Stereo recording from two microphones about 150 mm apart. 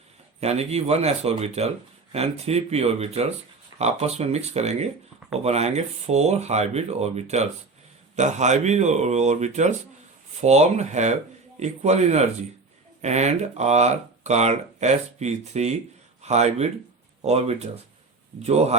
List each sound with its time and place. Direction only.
0.3 s speech: 45° right (ahead or behind)